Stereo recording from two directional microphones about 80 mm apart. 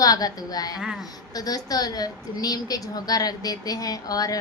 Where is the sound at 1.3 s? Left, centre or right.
Left.